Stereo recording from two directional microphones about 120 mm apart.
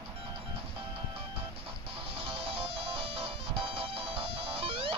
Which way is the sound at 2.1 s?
45° right (ahead or behind).